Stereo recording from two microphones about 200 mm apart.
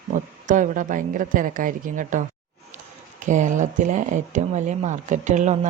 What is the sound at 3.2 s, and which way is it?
Speech, 40° right (ahead or behind).